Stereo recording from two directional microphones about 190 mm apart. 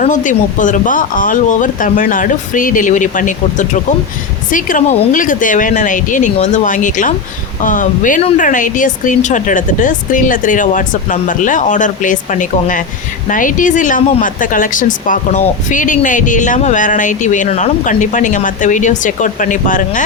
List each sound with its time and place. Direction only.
0.0 s speech: 40° left (ahead or behind)